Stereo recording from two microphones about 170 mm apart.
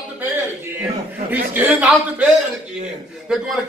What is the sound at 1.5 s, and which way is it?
Speech, 10° right (ahead or behind).